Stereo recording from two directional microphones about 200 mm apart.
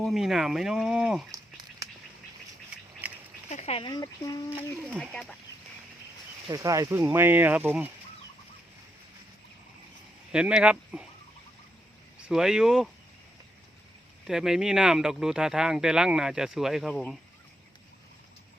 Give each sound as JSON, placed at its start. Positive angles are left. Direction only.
{"t": 0.0, "sound": "speech", "side_deg": 0}
{"t": 1.3, "sound": "a sound", "side_deg": -15}
{"t": 3.0, "sound": "duck", "side_deg": -5}
{"t": 3.5, "sound": "speech", "side_deg": 35}
{"t": 4.8, "sound": "speech", "side_deg": 5}
{"t": 6.5, "sound": "speech", "side_deg": -15}
{"t": 10.3, "sound": "speech", "side_deg": -5}
{"t": 12.3, "sound": "speech", "side_deg": -5}
{"t": 14.3, "sound": "speech", "side_deg": 0}